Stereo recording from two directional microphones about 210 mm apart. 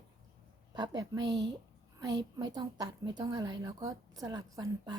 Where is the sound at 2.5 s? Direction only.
20° right (ahead or behind).